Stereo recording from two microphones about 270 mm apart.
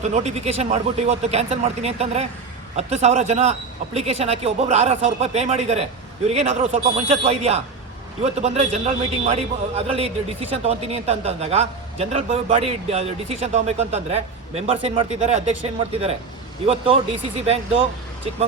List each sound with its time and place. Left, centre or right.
0.0 s a man's voice: right